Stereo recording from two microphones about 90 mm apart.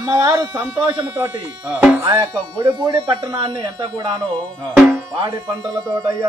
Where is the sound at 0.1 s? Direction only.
35° right (ahead or behind).